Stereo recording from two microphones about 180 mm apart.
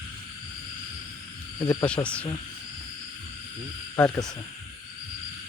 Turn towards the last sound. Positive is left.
turn(degrees=20)  # may be behind; listen again after turning